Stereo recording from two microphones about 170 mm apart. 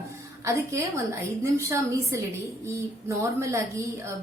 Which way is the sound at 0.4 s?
15° right (ahead or behind).